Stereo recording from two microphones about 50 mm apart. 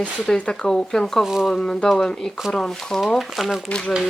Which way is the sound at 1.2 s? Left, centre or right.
Centre.